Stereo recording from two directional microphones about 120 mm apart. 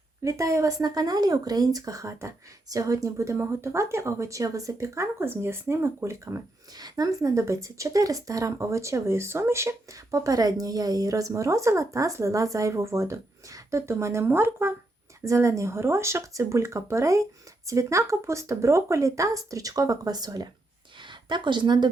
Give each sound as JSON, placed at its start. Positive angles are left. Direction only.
{"t": 0.2, "sound": "speech", "side_deg": -25}